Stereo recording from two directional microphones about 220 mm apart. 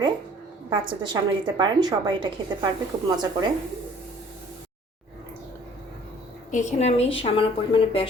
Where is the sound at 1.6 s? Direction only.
20° right (ahead or behind).